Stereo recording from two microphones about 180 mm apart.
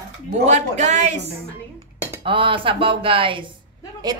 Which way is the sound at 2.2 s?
30° right (ahead or behind).